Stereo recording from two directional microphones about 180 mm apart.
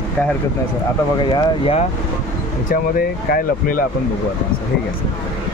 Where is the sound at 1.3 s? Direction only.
30° left (ahead or behind).